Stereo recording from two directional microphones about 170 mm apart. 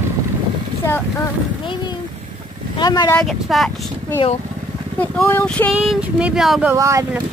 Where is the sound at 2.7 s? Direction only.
25° left (ahead or behind).